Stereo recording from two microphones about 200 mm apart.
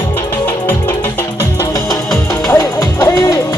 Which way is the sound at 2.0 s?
5° left (ahead or behind).